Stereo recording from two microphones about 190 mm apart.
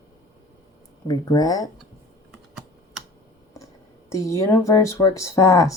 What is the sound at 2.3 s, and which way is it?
Typing, centre (ahead or behind).